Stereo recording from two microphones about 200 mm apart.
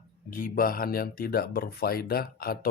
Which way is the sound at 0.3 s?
45° left (ahead or behind).